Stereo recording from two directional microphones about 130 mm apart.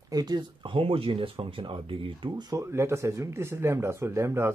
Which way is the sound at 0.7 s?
45° right (ahead or behind).